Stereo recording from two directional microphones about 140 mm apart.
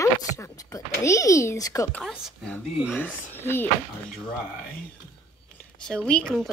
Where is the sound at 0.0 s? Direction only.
20° left (ahead or behind).